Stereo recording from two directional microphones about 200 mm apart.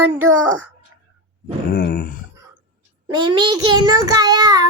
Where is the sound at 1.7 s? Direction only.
50° left (ahead or behind).